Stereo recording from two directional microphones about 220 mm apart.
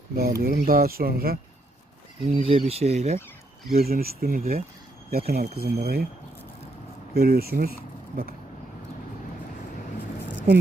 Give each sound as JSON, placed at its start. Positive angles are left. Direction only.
{"t": 0.2, "sound": "speech", "side_deg": -45}
{"t": 2.3, "sound": "speech", "side_deg": -25}
{"t": 3.7, "sound": "speech", "side_deg": -45}
{"t": 7.1, "sound": "speech", "side_deg": -45}